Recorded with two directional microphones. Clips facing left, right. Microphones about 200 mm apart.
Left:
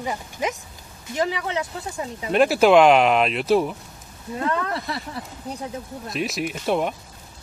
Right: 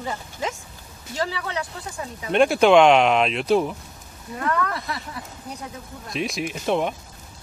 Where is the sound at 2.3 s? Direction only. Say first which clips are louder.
Even; centre (ahead or behind).